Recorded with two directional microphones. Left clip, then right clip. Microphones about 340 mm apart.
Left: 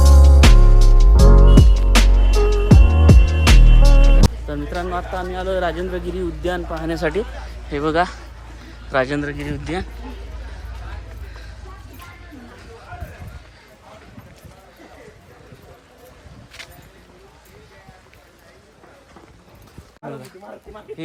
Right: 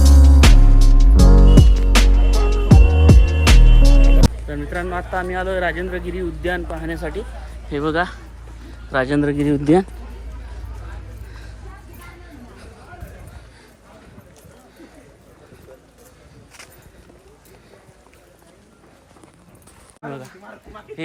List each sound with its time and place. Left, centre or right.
0.0 s music: centre
4.4 s speech: centre
6.9 s speech: left
7.7 s speech: centre
20.5 s bird: centre